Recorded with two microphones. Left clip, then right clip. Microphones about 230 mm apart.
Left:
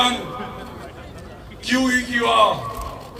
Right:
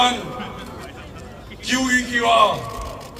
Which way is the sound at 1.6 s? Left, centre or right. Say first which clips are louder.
Even; left.